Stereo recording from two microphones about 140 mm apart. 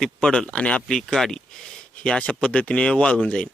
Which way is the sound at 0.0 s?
5° left (ahead or behind).